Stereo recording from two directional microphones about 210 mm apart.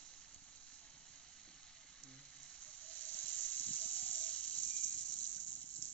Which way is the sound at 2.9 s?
5° left (ahead or behind).